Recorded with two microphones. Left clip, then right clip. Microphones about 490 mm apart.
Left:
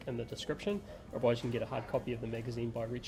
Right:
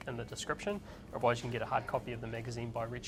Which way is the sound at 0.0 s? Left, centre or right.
Right.